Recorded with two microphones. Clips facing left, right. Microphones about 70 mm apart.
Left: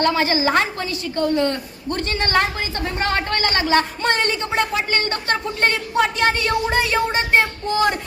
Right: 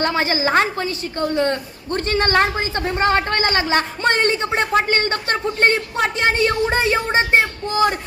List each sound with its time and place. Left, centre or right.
0.0 s a woman's voice: right